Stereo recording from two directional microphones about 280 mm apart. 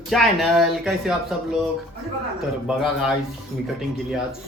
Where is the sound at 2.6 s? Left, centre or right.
Centre.